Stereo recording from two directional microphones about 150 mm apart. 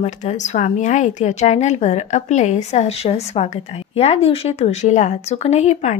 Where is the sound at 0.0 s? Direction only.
50° left (ahead or behind).